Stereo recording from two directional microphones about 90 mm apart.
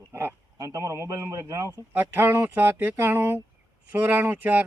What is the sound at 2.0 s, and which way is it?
Speech, 20° right (ahead or behind).